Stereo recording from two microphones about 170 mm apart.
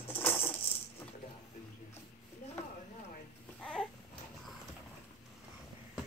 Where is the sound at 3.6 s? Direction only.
5° left (ahead or behind).